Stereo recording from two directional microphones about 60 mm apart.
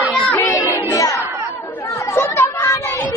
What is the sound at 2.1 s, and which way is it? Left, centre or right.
Children playing, left.